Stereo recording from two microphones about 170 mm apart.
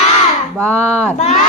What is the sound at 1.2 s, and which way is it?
Speech, 40° left (ahead or behind).